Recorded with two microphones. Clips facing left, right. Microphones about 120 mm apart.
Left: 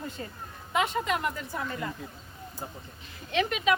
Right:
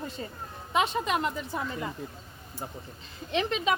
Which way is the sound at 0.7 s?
25° right (ahead or behind).